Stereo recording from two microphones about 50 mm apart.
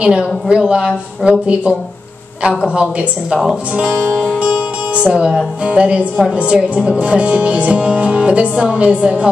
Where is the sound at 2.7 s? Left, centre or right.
Right.